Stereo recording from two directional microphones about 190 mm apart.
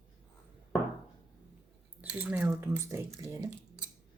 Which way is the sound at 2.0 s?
10° right (ahead or behind).